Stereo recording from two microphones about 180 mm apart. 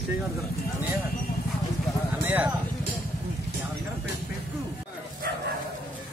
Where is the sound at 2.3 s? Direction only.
10° right (ahead or behind).